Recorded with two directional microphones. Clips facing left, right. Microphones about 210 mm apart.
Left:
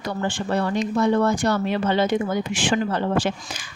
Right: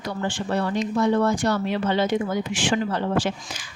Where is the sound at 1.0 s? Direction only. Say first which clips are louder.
Left 1 dB; 55° left (ahead or behind).